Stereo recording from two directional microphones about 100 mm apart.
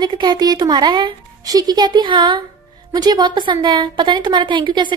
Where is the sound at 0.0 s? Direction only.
50° right (ahead or behind).